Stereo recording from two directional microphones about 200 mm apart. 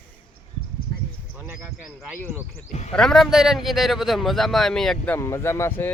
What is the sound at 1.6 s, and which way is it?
Speech, 10° right (ahead or behind).